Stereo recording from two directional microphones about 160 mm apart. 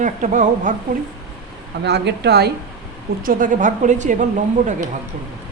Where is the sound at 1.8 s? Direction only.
90° right.